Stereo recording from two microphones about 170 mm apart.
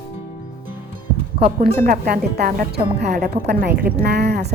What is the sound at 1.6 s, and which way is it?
Speech, 60° right (ahead or behind).